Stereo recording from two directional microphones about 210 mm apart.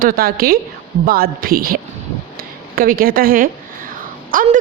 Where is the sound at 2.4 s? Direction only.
45° right (ahead or behind).